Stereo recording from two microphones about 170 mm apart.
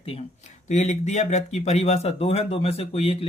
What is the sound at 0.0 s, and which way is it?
Speech, 35° left (ahead or behind).